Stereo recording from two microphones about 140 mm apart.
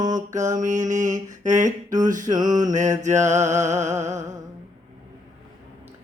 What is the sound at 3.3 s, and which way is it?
Music, 20° right (ahead or behind).